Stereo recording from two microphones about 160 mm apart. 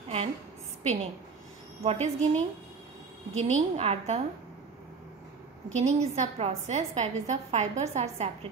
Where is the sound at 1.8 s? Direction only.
40° right (ahead or behind).